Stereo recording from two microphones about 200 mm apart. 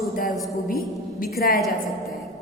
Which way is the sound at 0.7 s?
45° left (ahead or behind).